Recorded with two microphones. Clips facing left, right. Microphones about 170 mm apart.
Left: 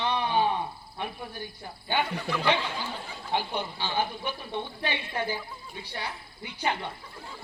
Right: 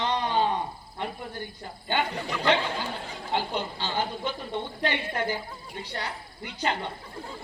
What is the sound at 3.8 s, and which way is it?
Speech, 15° left (ahead or behind).